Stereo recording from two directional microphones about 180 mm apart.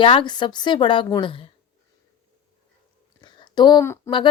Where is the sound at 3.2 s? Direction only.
25° left (ahead or behind).